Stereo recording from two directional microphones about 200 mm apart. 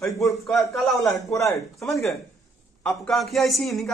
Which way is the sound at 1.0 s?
15° left (ahead or behind).